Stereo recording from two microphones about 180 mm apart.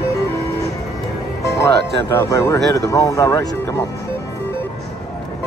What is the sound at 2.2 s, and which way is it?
Speech, 15° left (ahead or behind).